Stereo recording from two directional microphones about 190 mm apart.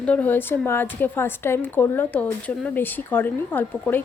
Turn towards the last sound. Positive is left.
turn(degrees=10)  # may be behind; listen again after turning